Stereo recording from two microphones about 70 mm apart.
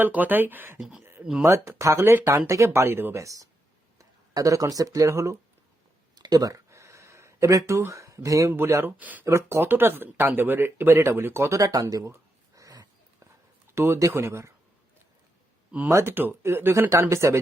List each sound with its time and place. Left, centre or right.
0.0 s speech: right
0.8 s speech: centre
1.4 s speech: right
3.2 s speech: right
6.1 s a sound: right
6.5 s a sound: right
8.5 s speech: right
9.0 s speech: right
9.2 s speech: right
12.5 s a sound: right
13.7 s speech: right
15.9 s speech: right